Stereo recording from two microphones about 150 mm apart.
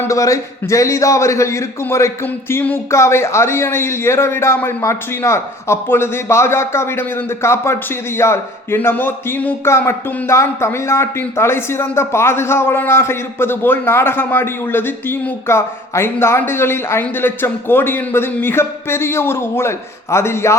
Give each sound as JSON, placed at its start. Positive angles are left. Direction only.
{"t": 0.0, "sound": "a man's voice", "side_deg": 20}